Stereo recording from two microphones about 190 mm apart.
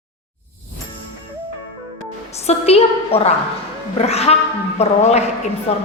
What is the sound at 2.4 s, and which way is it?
A woman's voice, 30° left (ahead or behind).